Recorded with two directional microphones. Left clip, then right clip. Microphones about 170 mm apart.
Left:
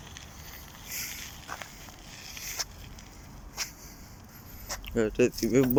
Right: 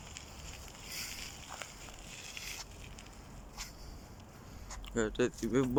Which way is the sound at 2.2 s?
Centre (ahead or behind).